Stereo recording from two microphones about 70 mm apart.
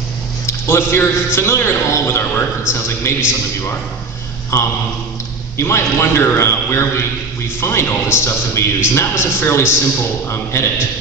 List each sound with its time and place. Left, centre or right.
0.5 s a man's voice: left
4.5 s a man's voice: left